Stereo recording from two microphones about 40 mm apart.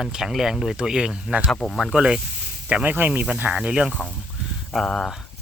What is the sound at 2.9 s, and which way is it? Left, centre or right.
Speech, right.